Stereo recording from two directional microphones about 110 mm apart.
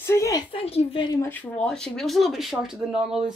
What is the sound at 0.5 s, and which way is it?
Speech, 60° left (ahead or behind).